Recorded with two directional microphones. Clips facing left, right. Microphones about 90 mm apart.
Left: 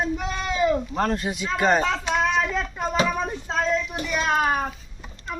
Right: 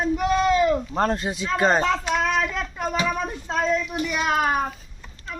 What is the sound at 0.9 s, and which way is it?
Speech, 30° right (ahead or behind).